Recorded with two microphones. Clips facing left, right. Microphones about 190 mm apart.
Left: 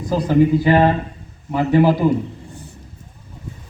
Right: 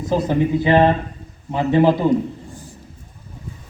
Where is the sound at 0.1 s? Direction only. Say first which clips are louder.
Left 3 dB; 20° right (ahead or behind).